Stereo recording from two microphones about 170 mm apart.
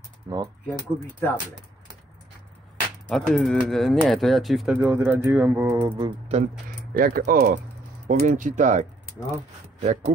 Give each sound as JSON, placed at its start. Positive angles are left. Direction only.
{"t": 0.3, "sound": "speech", "side_deg": -20}
{"t": 0.7, "sound": "speech", "side_deg": 10}
{"t": 3.1, "sound": "speech", "side_deg": 5}
{"t": 4.7, "sound": "a sound", "side_deg": -10}
{"t": 5.9, "sound": "speech", "side_deg": -30}
{"t": 6.9, "sound": "speech", "side_deg": -60}
{"t": 8.1, "sound": "speech", "side_deg": -45}